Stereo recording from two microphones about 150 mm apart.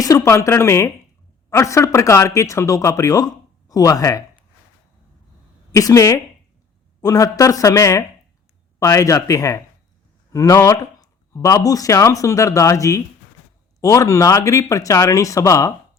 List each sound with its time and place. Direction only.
0.0 s speech: 20° left (ahead or behind)
5.7 s speech: 20° left (ahead or behind)